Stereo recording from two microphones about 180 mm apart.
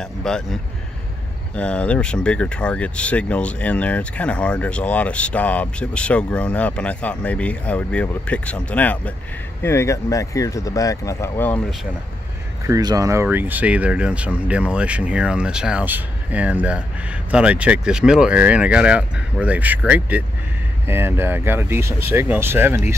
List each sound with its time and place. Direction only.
0.0 s speech: 5° left (ahead or behind)
12.6 s speech: 20° right (ahead or behind)